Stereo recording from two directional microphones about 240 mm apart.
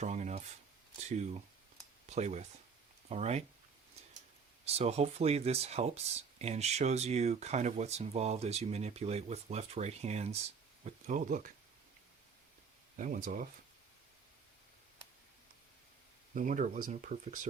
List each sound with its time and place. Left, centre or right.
0.0 s speech: right
4.6 s speech: right
13.0 s speech: right
16.3 s speech: right